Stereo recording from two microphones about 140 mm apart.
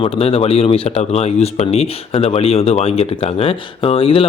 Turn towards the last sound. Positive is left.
turn(degrees=40)  # may be behind; listen again after turning